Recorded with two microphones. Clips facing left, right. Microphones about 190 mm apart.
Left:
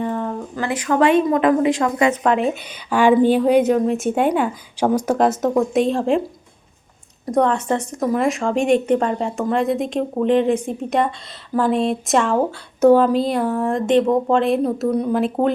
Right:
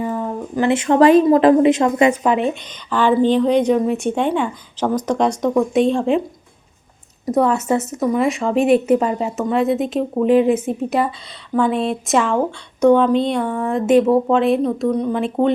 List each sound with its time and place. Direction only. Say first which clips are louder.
0.0 s speech: right 1 dB; 10° right (ahead or behind)
2.2 s speech: right 1 dB; centre (ahead or behind)
2.6 s a woman's voice: left 5 dB; 10° left (ahead or behind)
7.3 s speech: right 1 dB; 5° right (ahead or behind)